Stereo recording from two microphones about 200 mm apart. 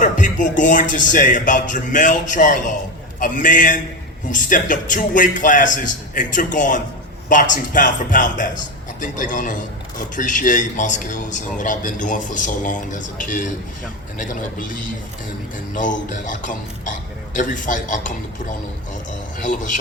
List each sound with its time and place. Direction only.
0.0 s speech: 40° left (ahead or behind)
19.4 s speech: 40° left (ahead or behind)